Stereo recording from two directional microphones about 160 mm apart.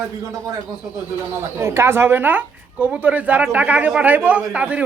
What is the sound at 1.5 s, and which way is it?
Speech, 15° right (ahead or behind).